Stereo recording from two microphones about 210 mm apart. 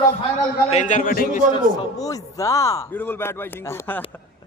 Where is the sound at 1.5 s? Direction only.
15° left (ahead or behind).